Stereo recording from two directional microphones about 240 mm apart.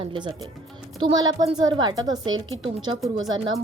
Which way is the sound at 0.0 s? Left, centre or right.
Right.